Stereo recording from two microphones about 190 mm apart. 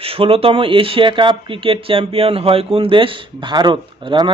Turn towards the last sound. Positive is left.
turn(degrees=-25)  # may be behind; listen again after turning